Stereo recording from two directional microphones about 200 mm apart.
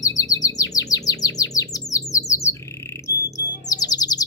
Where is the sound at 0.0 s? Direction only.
15° left (ahead or behind).